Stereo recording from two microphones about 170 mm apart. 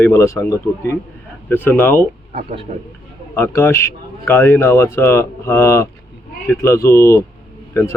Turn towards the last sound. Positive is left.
turn(degrees=15)  # may be behind; listen again after turning